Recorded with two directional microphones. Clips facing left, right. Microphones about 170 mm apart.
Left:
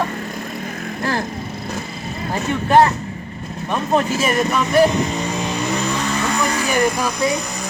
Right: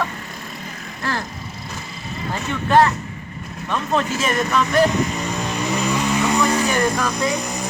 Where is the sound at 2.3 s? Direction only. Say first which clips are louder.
Left 2 dB; 15° left (ahead or behind).